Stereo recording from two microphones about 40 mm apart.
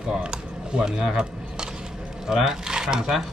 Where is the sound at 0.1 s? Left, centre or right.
Right.